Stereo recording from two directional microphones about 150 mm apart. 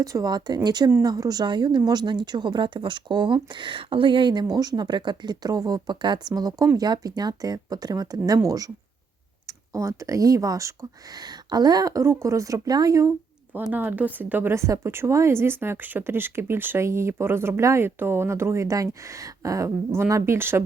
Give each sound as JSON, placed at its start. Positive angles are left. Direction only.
{"t": 0.0, "sound": "a woman's voice", "side_deg": -25}